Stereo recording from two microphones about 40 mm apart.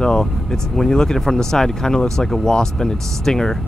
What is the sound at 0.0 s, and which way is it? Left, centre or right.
Speech, centre.